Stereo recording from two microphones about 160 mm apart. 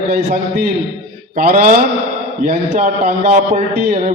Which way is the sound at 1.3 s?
65° right (ahead or behind).